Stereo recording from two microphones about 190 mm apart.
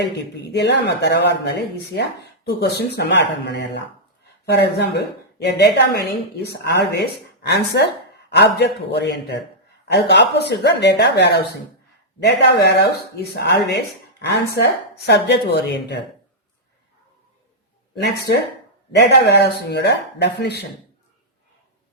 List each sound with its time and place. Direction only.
0.0 s a woman's voice: 65° left (ahead or behind)
18.0 s a woman's voice: 60° left (ahead or behind)